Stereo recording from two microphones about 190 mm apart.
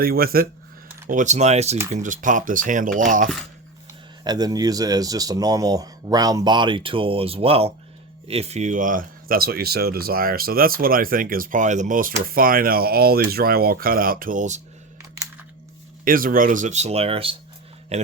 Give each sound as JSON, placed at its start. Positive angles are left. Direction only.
{"t": 0.0, "sound": "speech", "side_deg": -50}
{"t": 1.0, "sound": "speech", "side_deg": -40}
{"t": 4.2, "sound": "speech", "side_deg": -20}
{"t": 16.0, "sound": "speech", "side_deg": -50}